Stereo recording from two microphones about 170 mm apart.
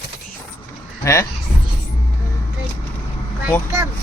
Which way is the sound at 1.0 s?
15° left (ahead or behind).